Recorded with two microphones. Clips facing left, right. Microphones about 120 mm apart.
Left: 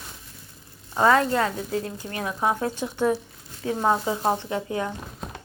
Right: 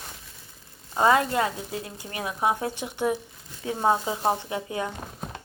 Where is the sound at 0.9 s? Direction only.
20° right (ahead or behind).